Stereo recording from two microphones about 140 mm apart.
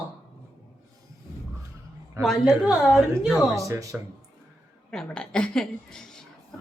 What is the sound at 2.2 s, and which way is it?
A woman's voice, centre (ahead or behind).